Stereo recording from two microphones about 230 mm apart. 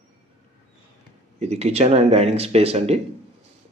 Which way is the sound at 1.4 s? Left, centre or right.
Right.